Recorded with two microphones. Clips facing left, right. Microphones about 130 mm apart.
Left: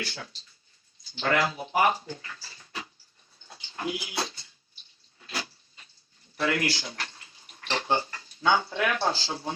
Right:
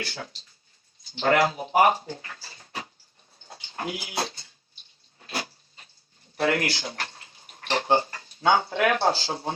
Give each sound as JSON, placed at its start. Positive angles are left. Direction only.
{"t": 0.0, "sound": "speech", "side_deg": -25}
{"t": 3.4, "sound": "dog", "side_deg": -30}
{"t": 4.1, "sound": "a sound", "side_deg": -30}
{"t": 6.4, "sound": "speech", "side_deg": -30}